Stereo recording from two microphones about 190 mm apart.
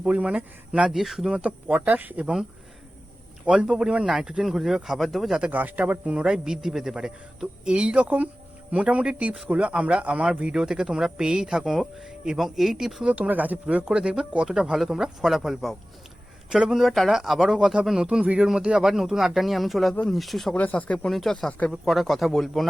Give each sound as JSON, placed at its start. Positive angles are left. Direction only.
{"t": 0.0, "sound": "speech", "side_deg": -5}